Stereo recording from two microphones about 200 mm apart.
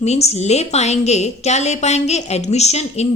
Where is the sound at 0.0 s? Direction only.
30° left (ahead or behind).